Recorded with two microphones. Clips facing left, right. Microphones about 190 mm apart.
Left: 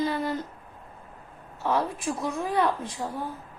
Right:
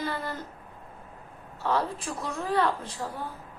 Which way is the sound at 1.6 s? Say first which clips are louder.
Left 1 dB; 15° left (ahead or behind).